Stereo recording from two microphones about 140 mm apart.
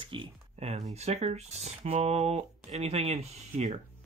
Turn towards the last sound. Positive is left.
turn(degrees=-50)  # may be behind; listen again after turning